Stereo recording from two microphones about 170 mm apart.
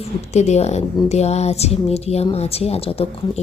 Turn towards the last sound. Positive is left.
turn(degrees=35)  # may be behind; listen again after turning